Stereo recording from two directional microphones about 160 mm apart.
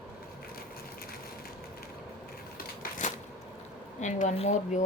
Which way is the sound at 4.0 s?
50° left (ahead or behind).